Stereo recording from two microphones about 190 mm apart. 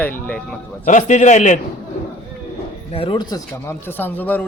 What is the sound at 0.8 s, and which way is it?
Speech, 40° left (ahead or behind).